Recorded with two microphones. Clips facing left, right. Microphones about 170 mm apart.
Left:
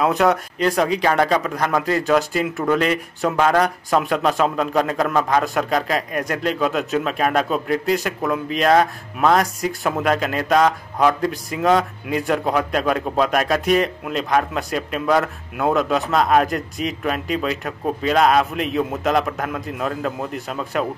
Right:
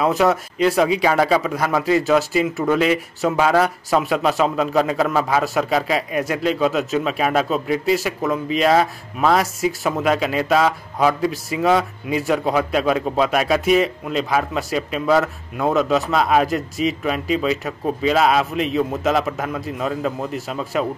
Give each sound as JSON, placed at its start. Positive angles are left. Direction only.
{"t": 0.0, "sound": "speech", "side_deg": 0}